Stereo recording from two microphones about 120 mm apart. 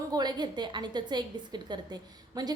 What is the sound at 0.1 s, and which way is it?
A woman's voice, 35° right (ahead or behind).